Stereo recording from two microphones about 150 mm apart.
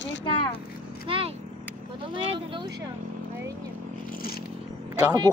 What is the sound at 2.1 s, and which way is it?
Speech, 35° right (ahead or behind).